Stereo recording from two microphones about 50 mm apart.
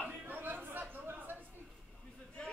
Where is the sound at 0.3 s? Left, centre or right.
Right.